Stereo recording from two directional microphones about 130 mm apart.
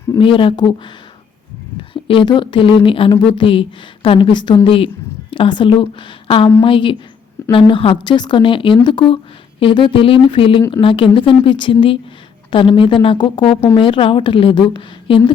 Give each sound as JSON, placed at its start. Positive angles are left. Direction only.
{"t": 0.2, "sound": "speech", "side_deg": 40}
{"t": 1.9, "sound": "speech", "side_deg": 40}